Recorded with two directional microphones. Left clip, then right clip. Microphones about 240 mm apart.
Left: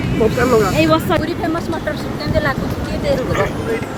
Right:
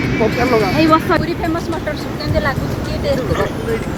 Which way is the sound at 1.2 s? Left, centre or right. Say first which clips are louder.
Even; centre.